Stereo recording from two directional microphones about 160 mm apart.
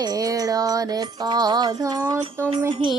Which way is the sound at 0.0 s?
25° right (ahead or behind).